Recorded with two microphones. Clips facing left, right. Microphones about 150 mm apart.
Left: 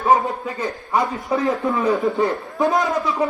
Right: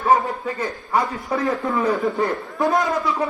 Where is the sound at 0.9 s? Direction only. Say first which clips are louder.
Left 1 dB; 20° left (ahead or behind).